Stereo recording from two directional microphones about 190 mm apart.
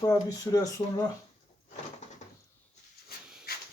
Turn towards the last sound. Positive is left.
turn(degrees=55)  # may be behind; listen again after turning